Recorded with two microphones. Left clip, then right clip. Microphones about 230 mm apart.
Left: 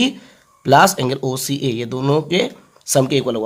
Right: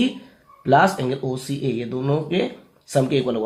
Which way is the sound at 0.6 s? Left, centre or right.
Left.